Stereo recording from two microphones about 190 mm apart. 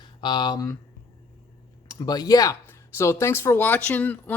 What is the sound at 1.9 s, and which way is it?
Speech, 20° left (ahead or behind).